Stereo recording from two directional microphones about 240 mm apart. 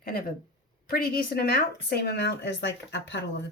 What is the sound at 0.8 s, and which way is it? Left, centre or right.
Speech, left.